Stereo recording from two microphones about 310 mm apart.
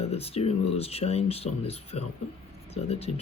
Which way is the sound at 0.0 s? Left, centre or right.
Centre.